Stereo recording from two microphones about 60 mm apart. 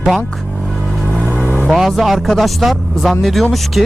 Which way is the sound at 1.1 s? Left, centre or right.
Right.